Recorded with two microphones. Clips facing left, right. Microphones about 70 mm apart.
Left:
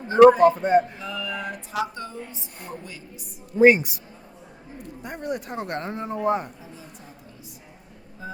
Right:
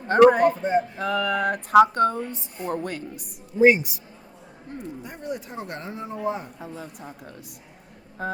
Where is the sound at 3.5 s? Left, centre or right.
Left.